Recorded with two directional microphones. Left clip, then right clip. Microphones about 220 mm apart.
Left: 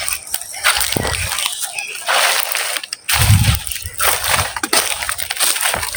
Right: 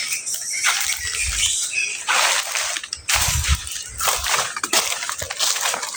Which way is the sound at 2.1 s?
50° left (ahead or behind).